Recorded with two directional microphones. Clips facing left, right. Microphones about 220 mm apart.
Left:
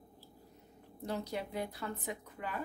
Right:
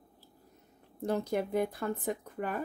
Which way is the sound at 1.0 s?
50° right (ahead or behind).